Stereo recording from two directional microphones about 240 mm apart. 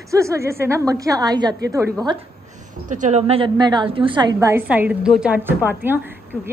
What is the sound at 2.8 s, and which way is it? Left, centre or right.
A woman's voice, right.